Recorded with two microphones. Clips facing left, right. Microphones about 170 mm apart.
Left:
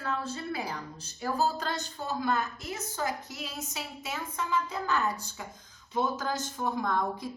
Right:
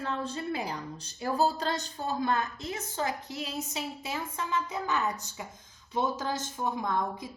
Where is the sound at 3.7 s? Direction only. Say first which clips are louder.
Right 1 dB; 25° right (ahead or behind).